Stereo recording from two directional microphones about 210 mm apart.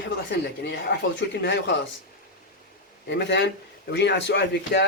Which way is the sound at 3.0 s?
55° left (ahead or behind).